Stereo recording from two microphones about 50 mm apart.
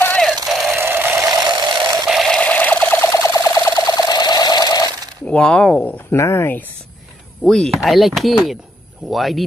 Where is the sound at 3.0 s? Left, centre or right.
Left.